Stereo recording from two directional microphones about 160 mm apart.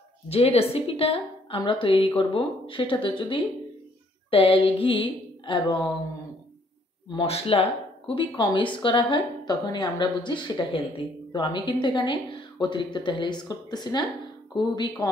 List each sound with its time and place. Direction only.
0.3 s speech: 40° left (ahead or behind)
4.3 s a sound: 35° left (ahead or behind)
7.1 s speech: 35° left (ahead or behind)